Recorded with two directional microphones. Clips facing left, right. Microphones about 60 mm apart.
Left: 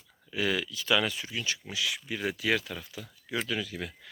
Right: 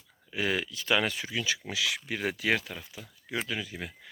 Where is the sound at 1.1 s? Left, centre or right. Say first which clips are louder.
Right 2 dB; right.